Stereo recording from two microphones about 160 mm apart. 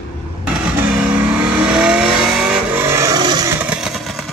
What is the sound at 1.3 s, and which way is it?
Vehicle, 5° right (ahead or behind).